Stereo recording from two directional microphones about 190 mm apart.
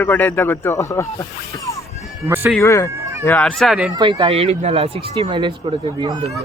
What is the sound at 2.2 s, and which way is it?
Speech, 10° right (ahead or behind).